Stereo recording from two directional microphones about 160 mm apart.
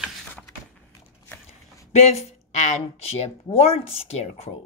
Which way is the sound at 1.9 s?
45° left (ahead or behind).